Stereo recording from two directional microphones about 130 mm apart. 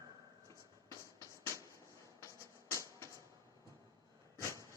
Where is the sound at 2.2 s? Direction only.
25° left (ahead or behind).